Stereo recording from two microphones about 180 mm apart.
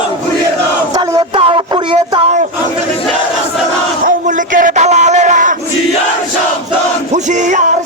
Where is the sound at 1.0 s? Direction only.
25° right (ahead or behind).